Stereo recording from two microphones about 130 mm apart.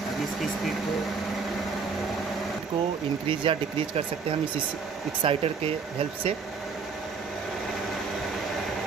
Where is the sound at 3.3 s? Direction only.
40° right (ahead or behind).